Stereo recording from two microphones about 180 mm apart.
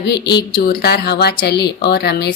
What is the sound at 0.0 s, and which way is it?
Speech, 65° left (ahead or behind).